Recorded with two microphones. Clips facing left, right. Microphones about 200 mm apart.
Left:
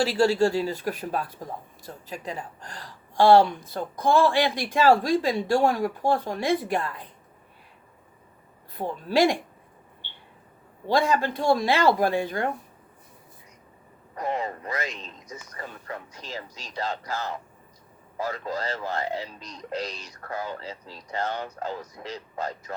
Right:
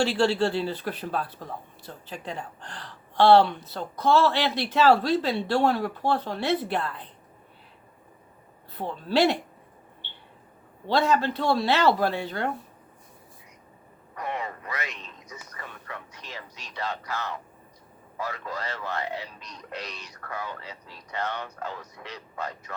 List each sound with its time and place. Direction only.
0.2 s speech: 10° left (ahead or behind)
8.8 s speech: 10° left (ahead or behind)
10.8 s speech: 10° left (ahead or behind)
14.2 s speech: 30° left (ahead or behind)